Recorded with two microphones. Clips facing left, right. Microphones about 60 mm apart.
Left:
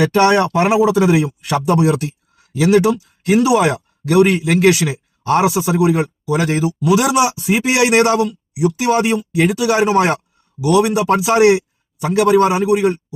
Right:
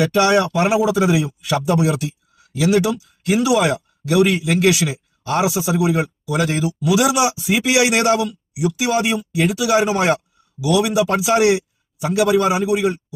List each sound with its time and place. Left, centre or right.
0.0 s speech: left